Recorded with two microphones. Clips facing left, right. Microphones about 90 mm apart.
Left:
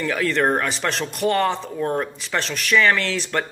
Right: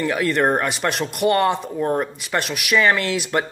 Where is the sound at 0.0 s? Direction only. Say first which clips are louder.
Right 1 dB; 5° right (ahead or behind).